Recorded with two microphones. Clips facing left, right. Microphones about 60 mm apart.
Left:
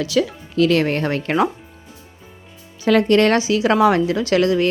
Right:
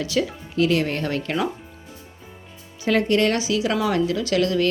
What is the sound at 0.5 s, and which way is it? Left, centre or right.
Speech, left.